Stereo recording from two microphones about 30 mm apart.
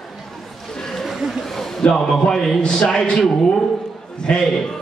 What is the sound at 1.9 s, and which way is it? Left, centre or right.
Speech, centre.